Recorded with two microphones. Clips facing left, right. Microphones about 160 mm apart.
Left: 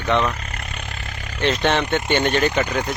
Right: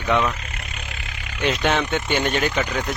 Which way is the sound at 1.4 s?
5° right (ahead or behind).